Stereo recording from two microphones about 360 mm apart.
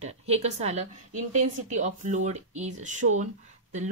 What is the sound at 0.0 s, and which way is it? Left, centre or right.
A woman's voice, centre.